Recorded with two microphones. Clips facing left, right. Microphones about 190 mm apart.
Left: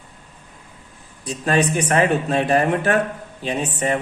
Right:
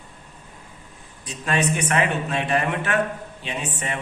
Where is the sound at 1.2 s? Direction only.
35° left (ahead or behind).